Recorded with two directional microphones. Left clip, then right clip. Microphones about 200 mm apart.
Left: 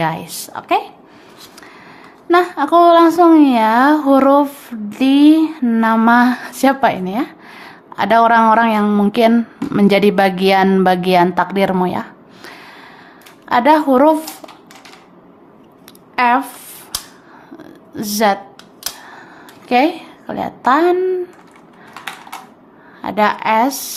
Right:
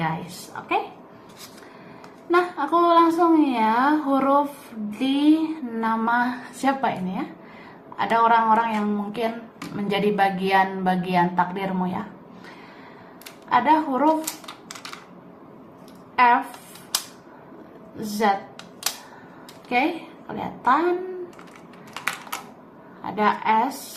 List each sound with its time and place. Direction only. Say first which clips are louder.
0.0 s a woman's voice: left 8 dB; 55° left (ahead or behind)
2.3 s speech: left 9 dB; 50° left (ahead or behind)
4.9 s a sound: left 10 dB; 50° left (ahead or behind)
9.7 s a woman's voice: left 10 dB; 55° left (ahead or behind)
13.5 s a woman's voice: left 8 dB; 55° left (ahead or behind)
16.1 s speech: left 4 dB; 55° left (ahead or behind)
17.9 s speech: left 7 dB; 60° left (ahead or behind)
19.7 s a woman's voice: left 9 dB; 50° left (ahead or behind)
23.0 s a woman's voice: left 7 dB; 60° left (ahead or behind)